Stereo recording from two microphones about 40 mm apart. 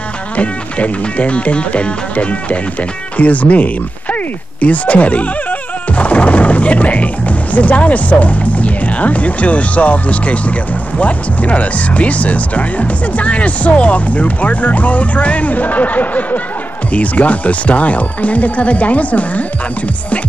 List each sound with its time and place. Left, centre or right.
0.4 s speech: left